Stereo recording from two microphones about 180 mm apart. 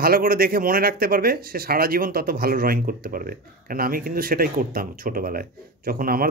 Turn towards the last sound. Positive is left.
turn(degrees=-55)  # may be behind; listen again after turning